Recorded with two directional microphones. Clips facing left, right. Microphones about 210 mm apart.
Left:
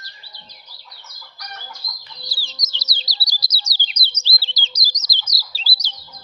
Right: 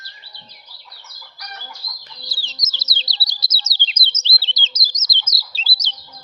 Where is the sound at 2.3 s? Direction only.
20° right (ahead or behind).